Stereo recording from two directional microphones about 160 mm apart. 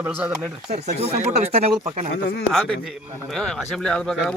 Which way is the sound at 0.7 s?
40° right (ahead or behind).